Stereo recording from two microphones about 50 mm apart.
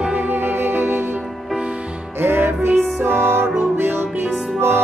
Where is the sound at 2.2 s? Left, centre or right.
Right.